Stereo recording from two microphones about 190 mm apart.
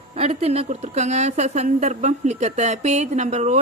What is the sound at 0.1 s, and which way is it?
A woman's voice, 35° right (ahead or behind).